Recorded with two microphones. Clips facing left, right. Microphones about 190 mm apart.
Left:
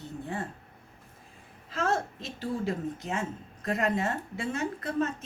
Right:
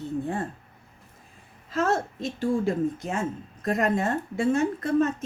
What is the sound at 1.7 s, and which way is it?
A woman's voice, 45° right (ahead or behind).